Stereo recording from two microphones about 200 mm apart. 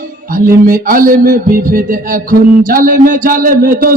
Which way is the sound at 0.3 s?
45° right (ahead or behind).